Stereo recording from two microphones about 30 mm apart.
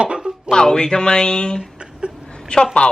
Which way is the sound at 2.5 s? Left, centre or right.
Left.